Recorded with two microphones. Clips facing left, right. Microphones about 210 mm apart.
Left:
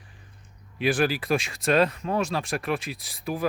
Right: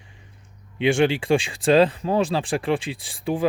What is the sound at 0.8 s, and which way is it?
Speech, 25° right (ahead or behind).